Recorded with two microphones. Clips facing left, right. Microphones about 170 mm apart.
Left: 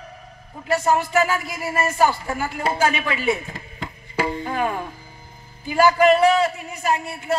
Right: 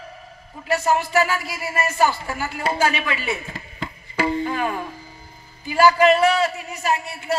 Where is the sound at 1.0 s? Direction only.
45° left (ahead or behind).